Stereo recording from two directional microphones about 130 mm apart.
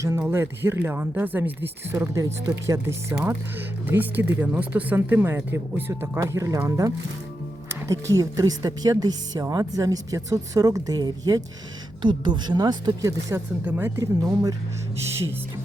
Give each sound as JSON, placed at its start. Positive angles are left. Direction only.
{"t": 0.0, "sound": "speech", "side_deg": -20}